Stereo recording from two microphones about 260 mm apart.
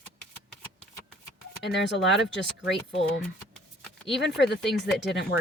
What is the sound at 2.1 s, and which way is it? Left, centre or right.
Speech, left.